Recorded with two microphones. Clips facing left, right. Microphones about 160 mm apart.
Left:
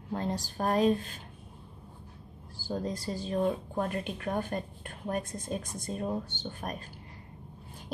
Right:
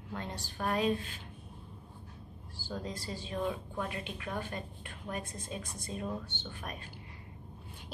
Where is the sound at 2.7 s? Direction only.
40° left (ahead or behind).